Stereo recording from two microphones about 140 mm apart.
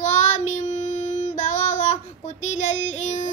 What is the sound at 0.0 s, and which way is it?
Child singing, 60° left (ahead or behind).